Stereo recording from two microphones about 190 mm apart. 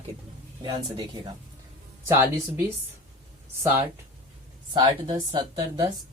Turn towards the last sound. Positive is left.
turn(degrees=-20)  # may be behind; listen again after turning